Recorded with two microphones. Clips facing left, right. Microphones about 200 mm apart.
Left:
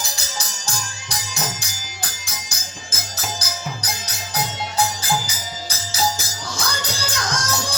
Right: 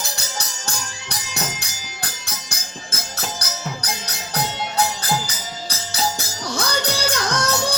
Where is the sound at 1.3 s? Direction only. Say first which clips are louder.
Right 1 dB; 65° right (ahead or behind).